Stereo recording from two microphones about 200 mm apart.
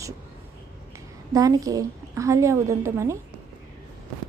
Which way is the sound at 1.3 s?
15° right (ahead or behind).